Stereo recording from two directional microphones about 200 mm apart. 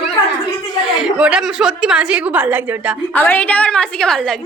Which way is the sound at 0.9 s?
5° right (ahead or behind).